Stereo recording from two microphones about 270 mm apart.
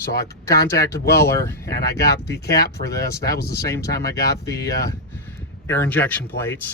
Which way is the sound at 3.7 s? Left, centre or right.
Centre.